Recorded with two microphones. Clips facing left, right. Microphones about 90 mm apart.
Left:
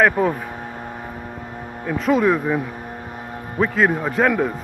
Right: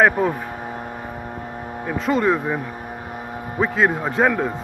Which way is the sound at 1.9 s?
Centre (ahead or behind).